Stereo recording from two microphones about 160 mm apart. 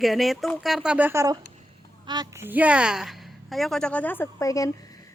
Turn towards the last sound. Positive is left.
turn(degrees=20)  # may be behind; listen again after turning